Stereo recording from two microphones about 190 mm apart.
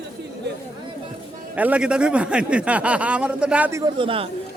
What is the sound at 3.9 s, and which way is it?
Speech, 25° right (ahead or behind).